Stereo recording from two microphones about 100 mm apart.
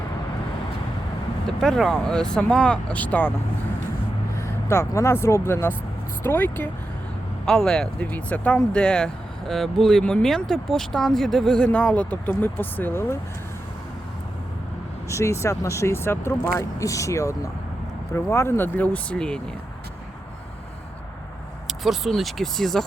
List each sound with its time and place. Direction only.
1.5 s speech: 5° left (ahead or behind)
4.4 s speech: 25° left (ahead or behind)
7.4 s speech: 5° left (ahead or behind)
11.6 s speech: 15° left (ahead or behind)
15.1 s speech: 30° left (ahead or behind); by 19.4 s 10° left (ahead or behind)
21.7 s speech: 5° right (ahead or behind)